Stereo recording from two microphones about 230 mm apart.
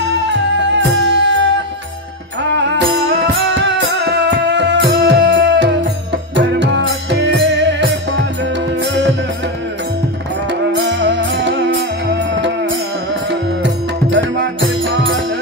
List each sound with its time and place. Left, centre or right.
1.0 s music: right
3.5 s music: right
10.7 s music: right
14.1 s music: right